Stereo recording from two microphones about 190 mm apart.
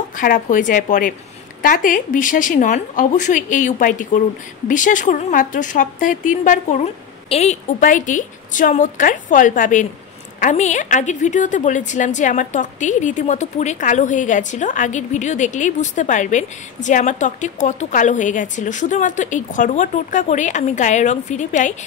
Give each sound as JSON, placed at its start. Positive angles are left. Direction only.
{"t": 0.2, "sound": "a woman's voice", "side_deg": 45}